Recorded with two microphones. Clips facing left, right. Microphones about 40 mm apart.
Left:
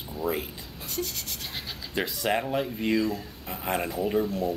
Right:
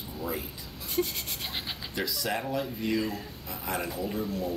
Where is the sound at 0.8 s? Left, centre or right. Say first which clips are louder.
Right 3 dB; centre.